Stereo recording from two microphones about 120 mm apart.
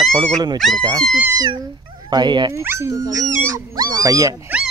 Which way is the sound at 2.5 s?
20° right (ahead or behind).